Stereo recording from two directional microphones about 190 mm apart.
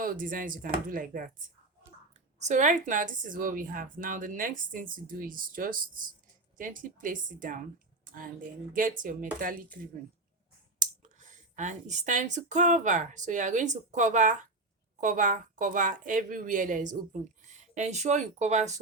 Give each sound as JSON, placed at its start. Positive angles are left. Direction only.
{"t": 0.0, "sound": "a woman's voice", "side_deg": -45}
{"t": 2.4, "sound": "a woman's voice", "side_deg": -40}
{"t": 10.8, "sound": "a woman's voice", "side_deg": -40}